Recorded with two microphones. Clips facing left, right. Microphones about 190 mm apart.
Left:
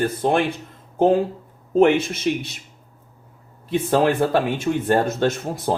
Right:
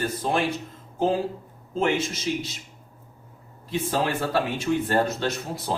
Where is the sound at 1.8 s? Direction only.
60° left (ahead or behind).